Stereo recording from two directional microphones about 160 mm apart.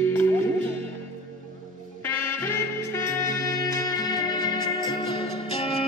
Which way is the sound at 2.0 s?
15° left (ahead or behind).